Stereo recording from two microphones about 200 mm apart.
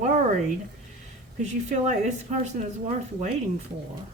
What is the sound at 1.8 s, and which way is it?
Speech, 35° right (ahead or behind).